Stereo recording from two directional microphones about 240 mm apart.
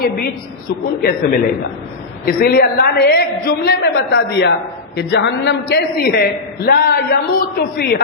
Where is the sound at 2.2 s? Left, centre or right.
Left.